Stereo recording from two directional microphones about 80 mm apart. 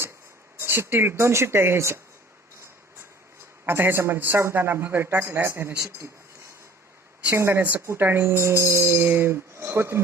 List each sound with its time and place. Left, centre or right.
0.6 s speech: right
3.7 s a man's voice: right
7.3 s speech: right